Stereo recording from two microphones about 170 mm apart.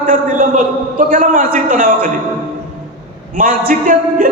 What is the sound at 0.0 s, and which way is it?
A man's voice, 50° right (ahead or behind).